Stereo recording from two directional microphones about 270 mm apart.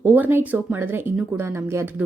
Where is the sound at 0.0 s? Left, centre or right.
Centre.